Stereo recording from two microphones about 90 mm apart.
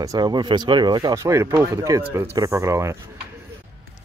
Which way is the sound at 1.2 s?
35° right (ahead or behind).